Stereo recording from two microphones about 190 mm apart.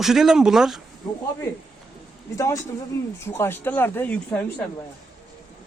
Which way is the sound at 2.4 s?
15° left (ahead or behind).